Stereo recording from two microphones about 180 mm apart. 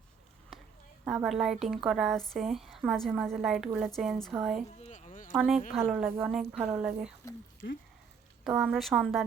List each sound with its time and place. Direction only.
1.0 s a woman's voice: centre (ahead or behind)
4.8 s a sound: 45° left (ahead or behind)
5.4 s a woman's voice: 5° right (ahead or behind)
7.6 s speech: 70° left (ahead or behind)
8.4 s a woman's voice: 5° right (ahead or behind)